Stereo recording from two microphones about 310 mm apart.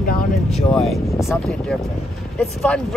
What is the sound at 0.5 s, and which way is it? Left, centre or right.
Speech, centre.